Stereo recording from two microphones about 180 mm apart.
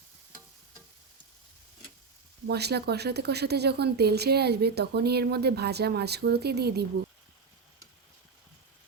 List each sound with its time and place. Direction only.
2.5 s speech: 65° right (ahead or behind)